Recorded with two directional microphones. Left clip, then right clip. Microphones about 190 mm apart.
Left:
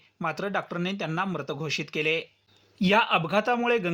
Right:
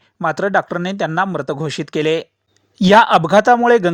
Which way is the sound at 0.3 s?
55° right (ahead or behind).